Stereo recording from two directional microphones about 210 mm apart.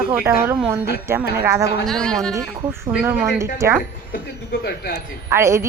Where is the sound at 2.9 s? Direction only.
10° right (ahead or behind).